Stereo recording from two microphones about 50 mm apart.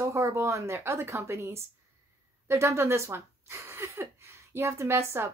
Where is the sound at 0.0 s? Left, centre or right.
Right.